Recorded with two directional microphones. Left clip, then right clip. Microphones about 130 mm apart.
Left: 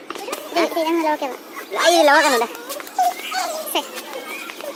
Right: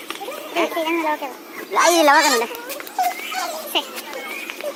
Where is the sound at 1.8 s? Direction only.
30° right (ahead or behind).